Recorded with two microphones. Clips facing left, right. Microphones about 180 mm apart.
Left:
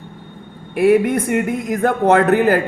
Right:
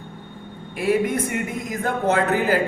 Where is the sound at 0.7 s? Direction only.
60° left (ahead or behind).